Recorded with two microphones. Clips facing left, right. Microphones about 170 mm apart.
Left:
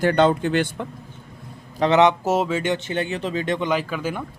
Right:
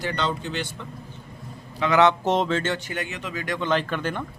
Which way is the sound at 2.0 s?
5° left (ahead or behind).